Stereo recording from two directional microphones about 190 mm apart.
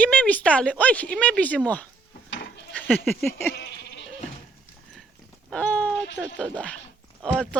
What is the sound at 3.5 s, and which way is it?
Bleat, 60° left (ahead or behind).